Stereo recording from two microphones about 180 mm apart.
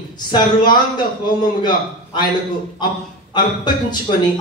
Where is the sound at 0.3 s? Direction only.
25° left (ahead or behind).